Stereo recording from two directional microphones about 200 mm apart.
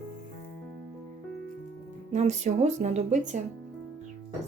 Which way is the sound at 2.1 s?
35° right (ahead or behind).